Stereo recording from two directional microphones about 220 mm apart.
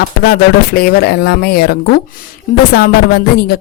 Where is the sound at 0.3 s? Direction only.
45° left (ahead or behind).